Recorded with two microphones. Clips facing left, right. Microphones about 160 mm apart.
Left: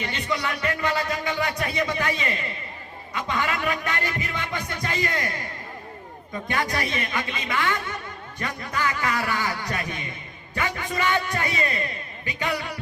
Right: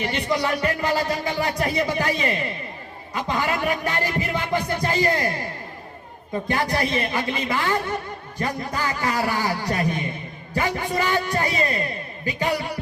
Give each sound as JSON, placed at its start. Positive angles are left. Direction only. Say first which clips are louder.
{"t": 0.0, "sound": "music", "louder": "right 5 dB", "side_deg": -30}
{"t": 6.5, "sound": "music", "louder": "right 4 dB", "side_deg": -30}